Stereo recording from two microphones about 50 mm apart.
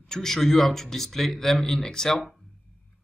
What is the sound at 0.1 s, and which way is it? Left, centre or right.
Speech, centre.